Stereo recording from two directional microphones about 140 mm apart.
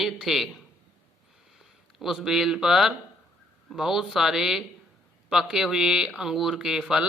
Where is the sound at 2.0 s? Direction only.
Centre (ahead or behind).